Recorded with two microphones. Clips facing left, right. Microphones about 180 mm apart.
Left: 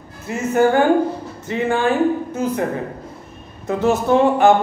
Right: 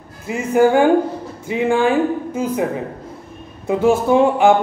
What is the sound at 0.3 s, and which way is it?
Speech, 10° right (ahead or behind).